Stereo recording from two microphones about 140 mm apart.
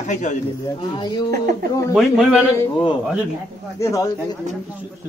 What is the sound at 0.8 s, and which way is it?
A woman's voice, 30° left (ahead or behind).